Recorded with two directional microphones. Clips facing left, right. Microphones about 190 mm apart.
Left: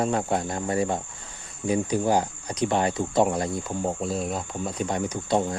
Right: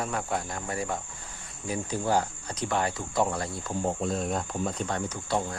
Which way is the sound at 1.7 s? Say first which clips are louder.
Left 6 dB; 20° left (ahead or behind).